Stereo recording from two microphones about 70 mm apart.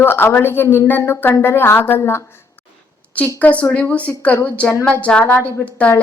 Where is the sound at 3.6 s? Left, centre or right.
Centre.